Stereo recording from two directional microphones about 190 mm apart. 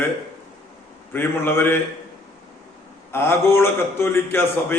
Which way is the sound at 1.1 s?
10° left (ahead or behind).